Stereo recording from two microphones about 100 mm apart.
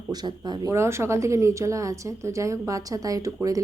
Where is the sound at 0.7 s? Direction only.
25° right (ahead or behind).